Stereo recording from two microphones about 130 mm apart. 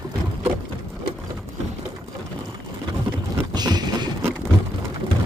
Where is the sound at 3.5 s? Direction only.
30° right (ahead or behind).